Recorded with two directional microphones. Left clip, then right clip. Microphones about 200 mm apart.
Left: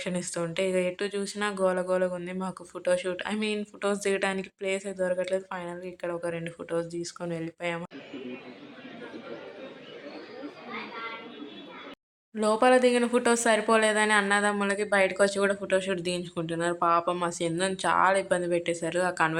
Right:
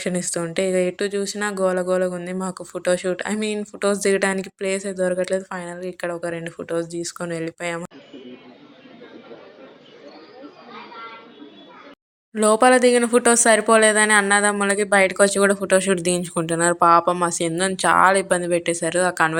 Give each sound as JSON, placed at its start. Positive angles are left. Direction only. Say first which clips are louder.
{"t": 0.0, "sound": "speech", "louder": "right 7 dB", "side_deg": -15}
{"t": 12.3, "sound": "speech", "louder": "right 7 dB", "side_deg": -20}